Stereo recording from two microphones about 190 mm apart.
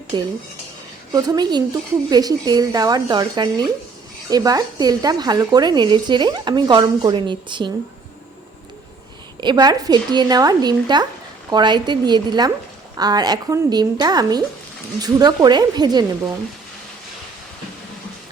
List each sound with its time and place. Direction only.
0.1 s speech: 20° right (ahead or behind)
9.4 s speech: 25° right (ahead or behind)